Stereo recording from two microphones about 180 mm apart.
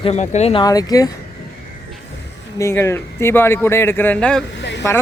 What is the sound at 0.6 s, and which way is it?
Speech, 20° left (ahead or behind).